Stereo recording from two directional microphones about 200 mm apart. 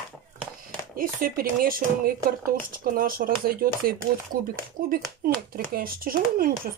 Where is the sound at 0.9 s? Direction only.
45° right (ahead or behind).